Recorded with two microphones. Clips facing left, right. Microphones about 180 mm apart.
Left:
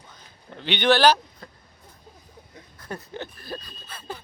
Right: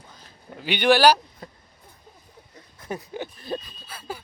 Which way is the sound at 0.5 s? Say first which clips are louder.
Right 1 dB; 5° right (ahead or behind).